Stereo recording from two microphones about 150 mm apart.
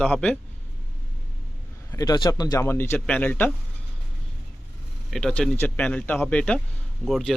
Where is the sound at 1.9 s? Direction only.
25° left (ahead or behind); by 3.5 s 10° left (ahead or behind).